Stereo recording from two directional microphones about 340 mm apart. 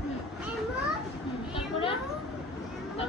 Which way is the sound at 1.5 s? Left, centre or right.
Centre.